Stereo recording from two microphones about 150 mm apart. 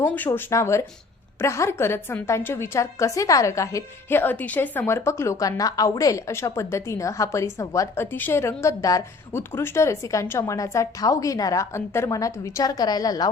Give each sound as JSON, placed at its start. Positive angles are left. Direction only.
{"t": 0.1, "sound": "a woman's voice", "side_deg": 15}